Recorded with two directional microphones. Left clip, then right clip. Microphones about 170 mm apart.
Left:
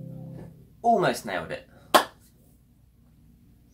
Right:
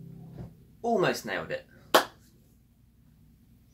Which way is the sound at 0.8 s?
Centre (ahead or behind).